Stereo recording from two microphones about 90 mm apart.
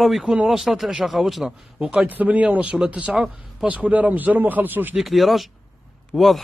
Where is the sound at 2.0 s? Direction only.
20° right (ahead or behind).